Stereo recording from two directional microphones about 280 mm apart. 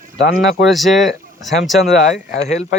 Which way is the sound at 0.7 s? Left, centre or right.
Centre.